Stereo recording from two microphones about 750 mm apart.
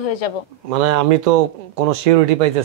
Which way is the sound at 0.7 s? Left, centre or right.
Right.